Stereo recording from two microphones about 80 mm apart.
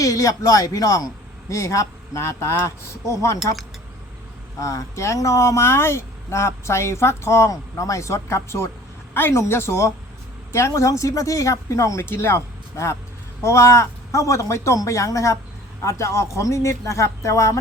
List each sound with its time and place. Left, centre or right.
0.0 s speech: left
4.6 s speech: left